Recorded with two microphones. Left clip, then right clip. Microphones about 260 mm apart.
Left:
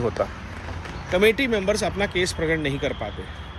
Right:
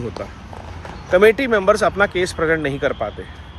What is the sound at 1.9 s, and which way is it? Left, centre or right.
Speech, centre.